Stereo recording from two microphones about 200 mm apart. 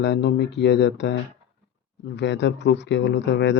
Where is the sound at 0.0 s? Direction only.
60° left (ahead or behind).